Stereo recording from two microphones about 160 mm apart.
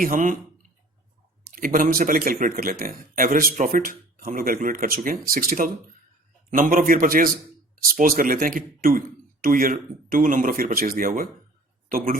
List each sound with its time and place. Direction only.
0.0 s speech: 55° right (ahead or behind)
1.5 s speech: 60° right (ahead or behind)